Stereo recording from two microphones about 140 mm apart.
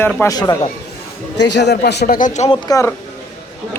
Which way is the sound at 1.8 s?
85° left.